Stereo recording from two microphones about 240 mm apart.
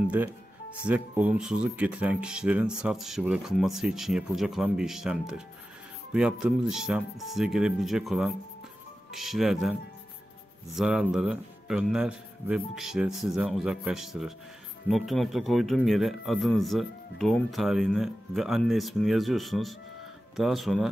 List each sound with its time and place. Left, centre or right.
0.8 s a man's voice: centre
10.8 s a man's voice: centre